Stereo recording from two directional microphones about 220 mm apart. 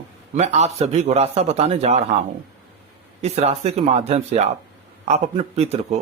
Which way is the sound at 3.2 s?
30° right (ahead or behind).